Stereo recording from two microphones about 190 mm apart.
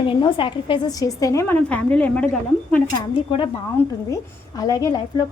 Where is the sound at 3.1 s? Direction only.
25° left (ahead or behind).